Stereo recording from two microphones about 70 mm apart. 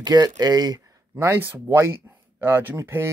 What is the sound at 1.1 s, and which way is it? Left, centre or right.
Speech, right.